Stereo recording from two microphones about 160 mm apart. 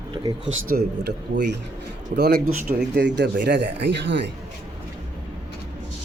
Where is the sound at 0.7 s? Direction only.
80° right.